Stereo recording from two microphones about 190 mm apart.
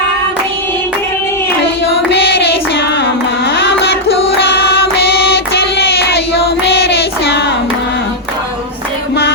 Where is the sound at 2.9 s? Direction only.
65° left (ahead or behind).